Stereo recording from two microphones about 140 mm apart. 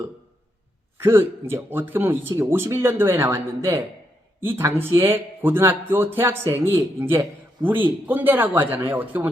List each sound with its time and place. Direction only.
0.9 s speech: 15° right (ahead or behind)